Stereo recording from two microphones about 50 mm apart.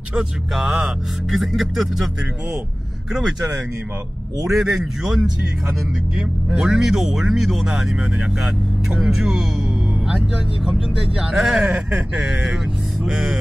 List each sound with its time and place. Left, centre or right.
0.2 s speech: centre
3.1 s speech: centre
6.7 s speech: centre